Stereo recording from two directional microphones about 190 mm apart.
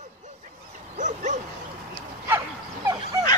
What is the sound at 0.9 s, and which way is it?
Bow-wow, 40° right (ahead or behind).